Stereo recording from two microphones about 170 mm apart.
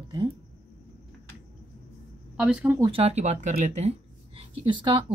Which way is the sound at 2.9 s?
35° right (ahead or behind).